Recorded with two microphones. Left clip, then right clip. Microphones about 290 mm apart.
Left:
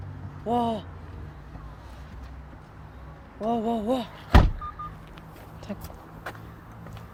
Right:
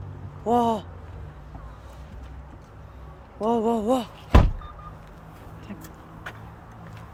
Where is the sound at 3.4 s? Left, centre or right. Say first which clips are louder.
Right 4 dB; centre.